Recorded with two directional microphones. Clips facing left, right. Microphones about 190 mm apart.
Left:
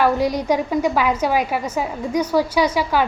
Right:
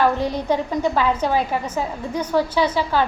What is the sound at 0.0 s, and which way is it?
A woman's voice, 10° left (ahead or behind).